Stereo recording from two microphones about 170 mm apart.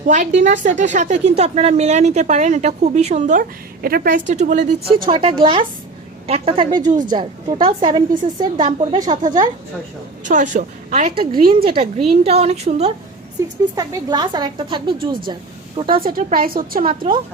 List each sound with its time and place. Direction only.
0.1 s a woman's voice: 45° right (ahead or behind)
3.8 s a woman's voice: 60° right (ahead or behind); by 6.7 s 35° right (ahead or behind)
6.7 s a woman's voice: 50° right (ahead or behind)
7.1 s a woman's voice: 30° right (ahead or behind)
10.2 s a woman's voice: 45° right (ahead or behind)
11.2 s a woman's voice: 30° right (ahead or behind)
13.4 s a woman's voice: 15° right (ahead or behind)
16.0 s a woman's voice: 55° right (ahead or behind)
16.9 s a woman's voice: 30° right (ahead or behind)